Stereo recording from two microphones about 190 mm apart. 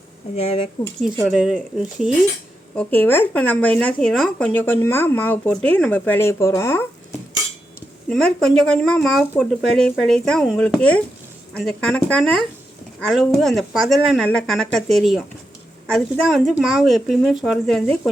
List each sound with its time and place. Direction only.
0.3 s speech: 30° left (ahead or behind)
1.2 s speech: 5° right (ahead or behind)
2.7 s speech: 10° left (ahead or behind)
8.1 s speech: centre (ahead or behind)